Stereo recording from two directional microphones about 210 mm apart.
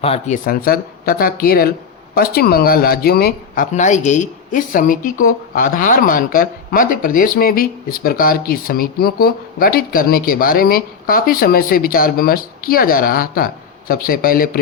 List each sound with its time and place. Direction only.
0.0 s speech: 30° left (ahead or behind)
0.4 s speech: 45° left (ahead or behind)